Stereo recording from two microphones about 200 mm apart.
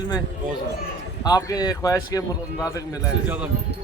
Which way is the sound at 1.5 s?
20° left (ahead or behind).